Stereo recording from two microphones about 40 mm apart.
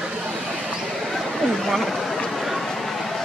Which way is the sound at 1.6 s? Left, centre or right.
Centre.